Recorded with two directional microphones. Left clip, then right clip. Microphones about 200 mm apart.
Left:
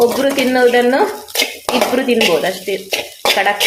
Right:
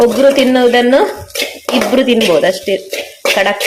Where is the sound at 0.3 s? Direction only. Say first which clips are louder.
Right 2 dB; 20° right (ahead or behind).